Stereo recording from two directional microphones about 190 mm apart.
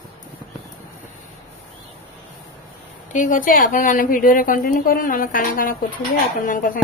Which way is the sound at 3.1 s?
45° left (ahead or behind).